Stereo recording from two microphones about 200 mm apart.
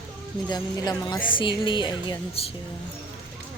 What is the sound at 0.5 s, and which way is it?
Speech, 20° left (ahead or behind).